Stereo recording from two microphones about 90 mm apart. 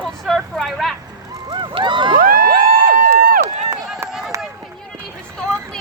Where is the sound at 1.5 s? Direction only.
60° right (ahead or behind); by 2.9 s 85° right.